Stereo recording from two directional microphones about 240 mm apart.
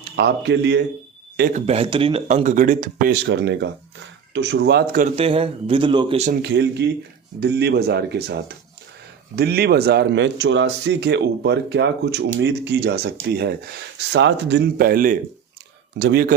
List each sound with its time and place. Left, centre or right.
0.2 s speech: right
1.5 s speech: right
5.1 s speech: right
6.4 s speech: right